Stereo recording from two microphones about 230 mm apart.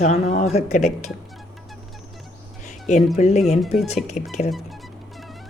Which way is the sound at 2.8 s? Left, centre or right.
Left.